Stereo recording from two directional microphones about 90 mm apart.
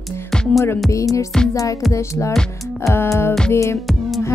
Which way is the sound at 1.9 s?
35° left (ahead or behind).